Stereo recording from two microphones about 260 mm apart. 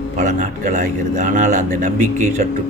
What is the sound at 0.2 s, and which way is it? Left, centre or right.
A man's voice, right.